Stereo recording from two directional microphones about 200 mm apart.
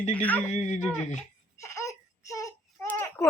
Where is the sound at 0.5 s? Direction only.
35° left (ahead or behind).